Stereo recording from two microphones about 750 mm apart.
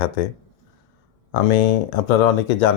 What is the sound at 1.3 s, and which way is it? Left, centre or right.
Speech, left.